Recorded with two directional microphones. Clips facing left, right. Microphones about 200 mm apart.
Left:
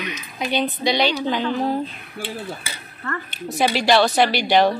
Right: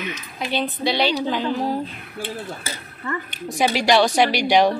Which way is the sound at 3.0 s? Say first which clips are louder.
Right 1 dB; 10° right (ahead or behind).